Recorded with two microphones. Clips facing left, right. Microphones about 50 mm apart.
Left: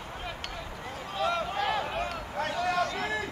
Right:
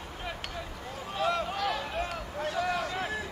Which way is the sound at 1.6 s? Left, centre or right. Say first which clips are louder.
Left 2 dB; left.